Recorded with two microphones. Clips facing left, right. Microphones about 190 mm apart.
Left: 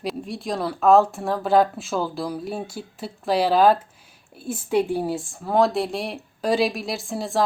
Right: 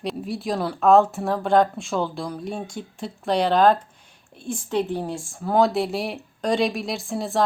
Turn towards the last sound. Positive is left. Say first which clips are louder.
# even
turn(degrees=0)  # may be behind; listen again after turning